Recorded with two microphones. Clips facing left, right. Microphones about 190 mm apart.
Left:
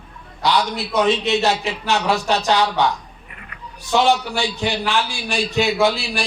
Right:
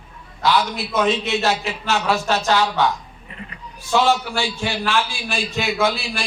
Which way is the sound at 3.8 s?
20° left (ahead or behind).